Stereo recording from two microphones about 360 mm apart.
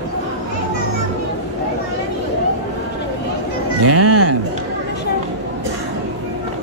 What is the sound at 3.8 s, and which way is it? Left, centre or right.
Speech, right.